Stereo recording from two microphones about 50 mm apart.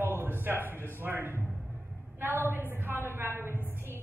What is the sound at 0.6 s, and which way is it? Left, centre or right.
A woman's voice, right.